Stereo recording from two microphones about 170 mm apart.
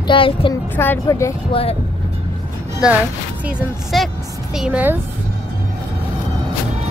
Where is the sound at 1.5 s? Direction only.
35° left (ahead or behind).